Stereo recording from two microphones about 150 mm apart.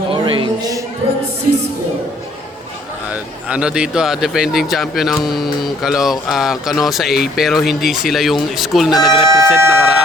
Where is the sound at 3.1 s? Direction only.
5° right (ahead or behind).